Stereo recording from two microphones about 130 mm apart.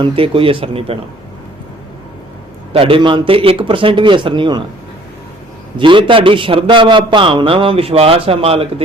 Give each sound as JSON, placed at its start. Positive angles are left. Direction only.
{"t": 0.0, "sound": "a man's voice", "side_deg": -45}
{"t": 2.7, "sound": "speech", "side_deg": -45}
{"t": 5.7, "sound": "a man's voice", "side_deg": -40}